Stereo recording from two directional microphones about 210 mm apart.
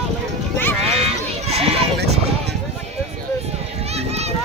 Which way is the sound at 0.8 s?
30° right (ahead or behind).